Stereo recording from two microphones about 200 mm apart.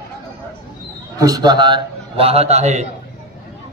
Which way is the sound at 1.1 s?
20° right (ahead or behind).